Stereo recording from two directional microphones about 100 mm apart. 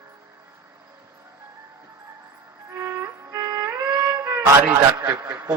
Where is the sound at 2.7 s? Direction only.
25° right (ahead or behind).